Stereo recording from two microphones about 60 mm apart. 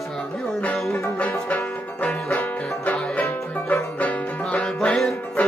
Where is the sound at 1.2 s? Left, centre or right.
Left.